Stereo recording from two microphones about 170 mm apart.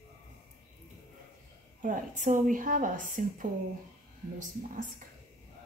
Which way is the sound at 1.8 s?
50° right (ahead or behind).